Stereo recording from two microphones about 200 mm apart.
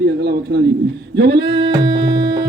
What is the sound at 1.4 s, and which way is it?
Music, 25° right (ahead or behind).